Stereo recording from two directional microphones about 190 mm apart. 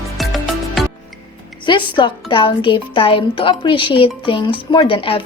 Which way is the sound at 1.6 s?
25° left (ahead or behind).